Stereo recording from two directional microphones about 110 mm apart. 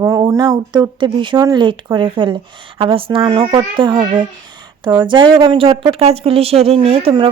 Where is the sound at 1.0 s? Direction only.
45° right (ahead or behind); by 7.1 s 65° right (ahead or behind).